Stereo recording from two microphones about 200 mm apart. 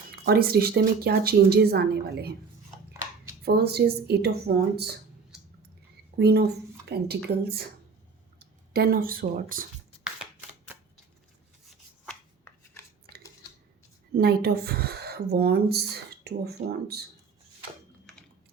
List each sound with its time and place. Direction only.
0.1 s speech: 50° right (ahead or behind)
3.4 s speech: 55° right (ahead or behind)
6.1 s speech: 50° right (ahead or behind)
12.5 s a sound: 10° left (ahead or behind)
14.1 s speech: 50° right (ahead or behind)
16.6 s speech: 40° right (ahead or behind)
18.1 s typing: 5° left (ahead or behind)